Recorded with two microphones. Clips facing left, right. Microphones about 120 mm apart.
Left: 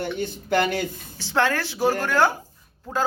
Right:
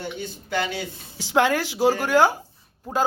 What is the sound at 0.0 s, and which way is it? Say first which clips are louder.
Speech: left 5 dB; 55° left (ahead or behind).